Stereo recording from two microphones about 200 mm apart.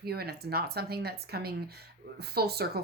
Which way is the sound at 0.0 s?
50° right (ahead or behind).